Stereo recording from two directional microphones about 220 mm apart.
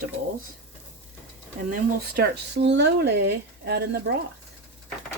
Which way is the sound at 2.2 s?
50° right (ahead or behind).